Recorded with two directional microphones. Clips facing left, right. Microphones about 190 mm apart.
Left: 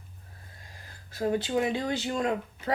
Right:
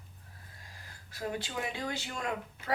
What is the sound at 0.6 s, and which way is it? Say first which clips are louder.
Speech: left 3 dB; 25° left (ahead or behind).